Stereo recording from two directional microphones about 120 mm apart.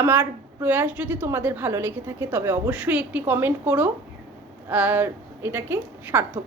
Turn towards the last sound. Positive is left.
turn(degrees=-15)  # may be behind; listen again after turning